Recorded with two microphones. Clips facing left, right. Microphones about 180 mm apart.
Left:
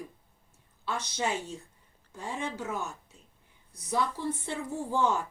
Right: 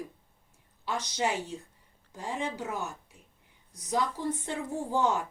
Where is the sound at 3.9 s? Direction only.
15° right (ahead or behind).